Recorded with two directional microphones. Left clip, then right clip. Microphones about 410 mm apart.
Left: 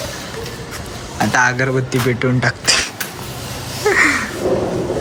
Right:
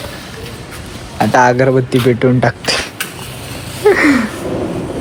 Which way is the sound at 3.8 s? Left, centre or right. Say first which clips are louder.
Right 3 dB; centre.